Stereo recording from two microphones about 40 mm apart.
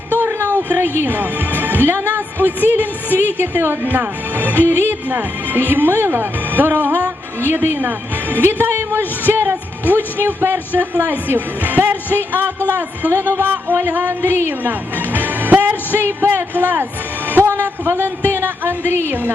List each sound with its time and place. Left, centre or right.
0.4 s speech: right
3.8 s speech: right
5.0 s speech: right
9.9 s speech: right
10.8 s a woman's voice: right
14.7 s music: right
17.9 s speech: right